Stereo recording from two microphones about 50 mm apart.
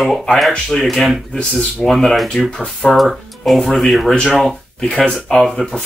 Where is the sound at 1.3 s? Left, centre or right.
Centre.